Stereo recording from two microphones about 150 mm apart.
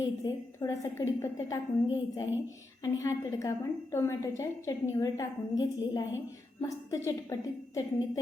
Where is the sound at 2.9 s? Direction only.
20° left (ahead or behind).